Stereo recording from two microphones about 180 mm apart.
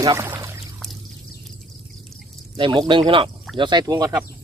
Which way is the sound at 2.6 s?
25° right (ahead or behind).